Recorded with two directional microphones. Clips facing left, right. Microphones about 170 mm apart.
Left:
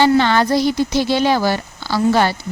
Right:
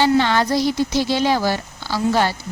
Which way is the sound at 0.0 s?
60° left (ahead or behind).